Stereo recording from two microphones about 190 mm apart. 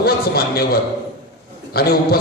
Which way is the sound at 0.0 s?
55° left (ahead or behind).